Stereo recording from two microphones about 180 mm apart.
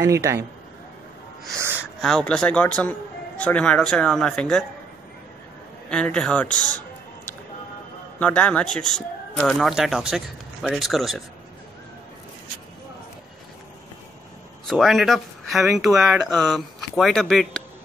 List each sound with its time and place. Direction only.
0.0 s a man's voice: 15° right (ahead or behind)
2.0 s speech: 5° left (ahead or behind)
5.9 s speech: 5° left (ahead or behind)
8.2 s speech: 5° left (ahead or behind)
14.7 s speech: centre (ahead or behind)